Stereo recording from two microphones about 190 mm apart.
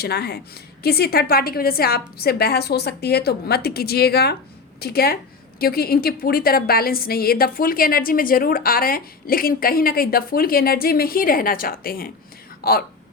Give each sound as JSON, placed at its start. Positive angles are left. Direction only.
{"t": 0.0, "sound": "a woman's voice", "side_deg": 60}